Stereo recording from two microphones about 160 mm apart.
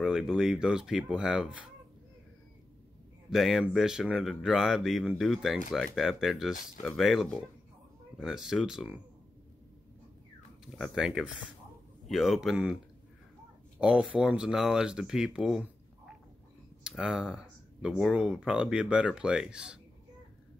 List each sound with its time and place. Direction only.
0.0 s speech: 5° right (ahead or behind)
3.3 s speech: centre (ahead or behind)
6.5 s speech: 55° left (ahead or behind)
6.8 s speech: centre (ahead or behind)
10.8 s speech: 5° right (ahead or behind)
13.7 s speech: 5° right (ahead or behind)
16.8 s speech: 5° right (ahead or behind)